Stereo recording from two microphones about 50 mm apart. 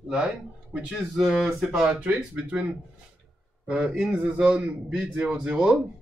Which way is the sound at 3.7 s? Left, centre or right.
Centre.